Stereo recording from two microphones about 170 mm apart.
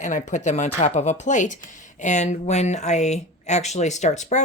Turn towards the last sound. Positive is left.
turn(degrees=45)  # may be behind; listen again after turning